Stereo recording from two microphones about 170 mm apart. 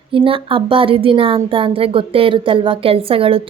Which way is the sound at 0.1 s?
30° right (ahead or behind).